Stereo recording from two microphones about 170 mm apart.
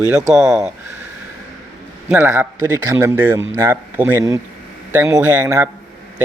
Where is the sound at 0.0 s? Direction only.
5° right (ahead or behind).